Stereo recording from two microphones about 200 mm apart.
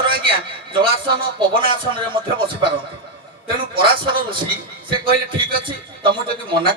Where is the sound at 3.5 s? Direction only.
25° right (ahead or behind).